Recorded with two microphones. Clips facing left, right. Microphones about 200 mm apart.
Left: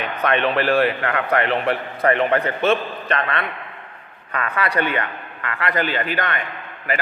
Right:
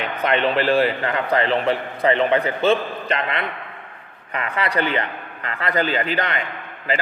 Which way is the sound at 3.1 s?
20° right (ahead or behind).